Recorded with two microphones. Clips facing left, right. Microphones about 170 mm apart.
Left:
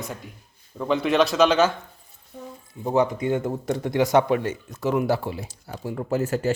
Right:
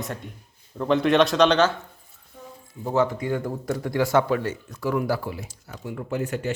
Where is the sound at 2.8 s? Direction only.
20° left (ahead or behind).